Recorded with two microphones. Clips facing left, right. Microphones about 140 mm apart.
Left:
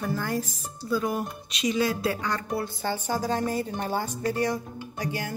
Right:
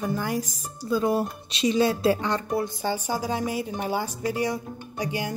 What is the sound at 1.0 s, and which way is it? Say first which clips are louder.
A woman's voice: right 5 dB; 30° right (ahead or behind).